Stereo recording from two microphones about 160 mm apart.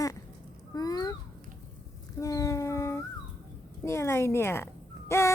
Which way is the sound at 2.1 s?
20° left (ahead or behind).